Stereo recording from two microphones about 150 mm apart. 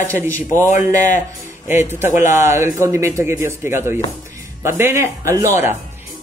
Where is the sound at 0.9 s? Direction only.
55° left (ahead or behind).